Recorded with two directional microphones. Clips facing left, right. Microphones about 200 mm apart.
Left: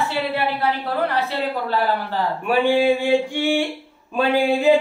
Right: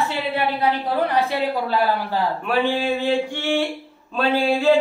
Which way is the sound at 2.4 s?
10° left (ahead or behind).